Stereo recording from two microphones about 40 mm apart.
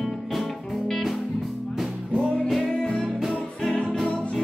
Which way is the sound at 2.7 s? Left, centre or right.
Centre.